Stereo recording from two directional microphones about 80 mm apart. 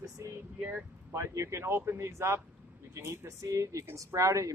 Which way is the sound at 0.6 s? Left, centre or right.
Centre.